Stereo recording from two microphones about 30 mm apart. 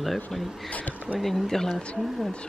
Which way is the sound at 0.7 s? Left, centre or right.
Left.